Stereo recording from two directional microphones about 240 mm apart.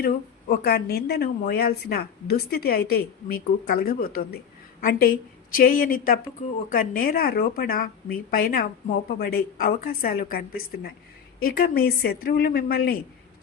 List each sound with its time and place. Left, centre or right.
0.0 s a woman's voice: left